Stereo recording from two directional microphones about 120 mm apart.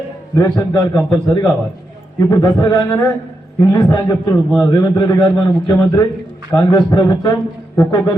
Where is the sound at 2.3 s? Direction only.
35° left (ahead or behind).